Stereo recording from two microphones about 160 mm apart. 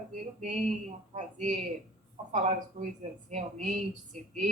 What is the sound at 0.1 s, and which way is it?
A woman's voice, 50° right (ahead or behind).